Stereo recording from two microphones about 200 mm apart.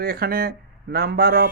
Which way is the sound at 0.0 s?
50° right (ahead or behind).